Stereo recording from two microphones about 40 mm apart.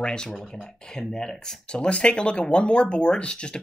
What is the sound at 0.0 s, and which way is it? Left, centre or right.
Speech, left.